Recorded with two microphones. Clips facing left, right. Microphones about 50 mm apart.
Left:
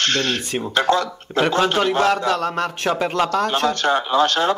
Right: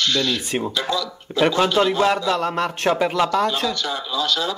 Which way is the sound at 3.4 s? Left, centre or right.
Left.